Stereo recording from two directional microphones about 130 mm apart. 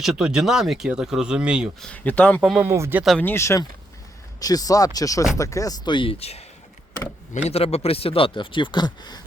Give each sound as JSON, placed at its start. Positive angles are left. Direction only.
{"t": 0.0, "sound": "speech", "side_deg": -5}
{"t": 1.8, "sound": "speech", "side_deg": 10}
{"t": 2.6, "sound": "speech", "side_deg": -20}
{"t": 3.2, "sound": "speech", "side_deg": 15}
{"t": 7.4, "sound": "speech", "side_deg": 50}